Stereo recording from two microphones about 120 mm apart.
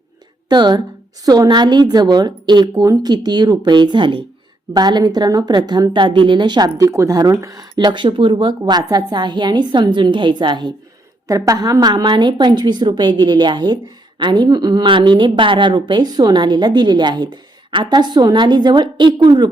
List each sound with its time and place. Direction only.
0.4 s a woman's voice: 35° right (ahead or behind)
11.3 s a woman's voice: 30° right (ahead or behind)